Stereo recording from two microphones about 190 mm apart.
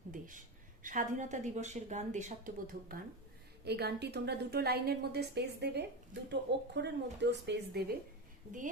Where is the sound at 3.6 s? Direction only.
60° right (ahead or behind).